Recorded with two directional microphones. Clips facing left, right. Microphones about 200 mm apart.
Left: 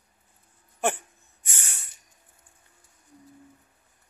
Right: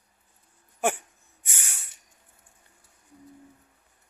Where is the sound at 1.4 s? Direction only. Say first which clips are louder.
Even; 10° right (ahead or behind).